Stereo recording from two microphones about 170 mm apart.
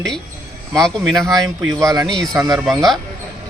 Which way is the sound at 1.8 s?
20° right (ahead or behind).